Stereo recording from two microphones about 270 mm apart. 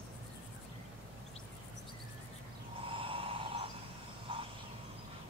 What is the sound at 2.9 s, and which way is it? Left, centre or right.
Vehicle, centre.